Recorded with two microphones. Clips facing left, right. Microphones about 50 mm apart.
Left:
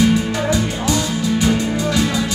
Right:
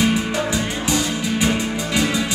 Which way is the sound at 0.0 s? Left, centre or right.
Right.